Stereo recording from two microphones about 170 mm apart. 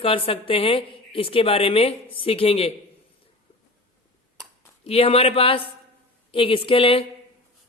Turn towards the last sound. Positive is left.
turn(degrees=30)  # may be behind; listen again after turning